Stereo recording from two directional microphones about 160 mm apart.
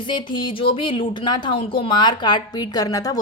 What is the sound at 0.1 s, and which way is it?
Speech, 30° left (ahead or behind).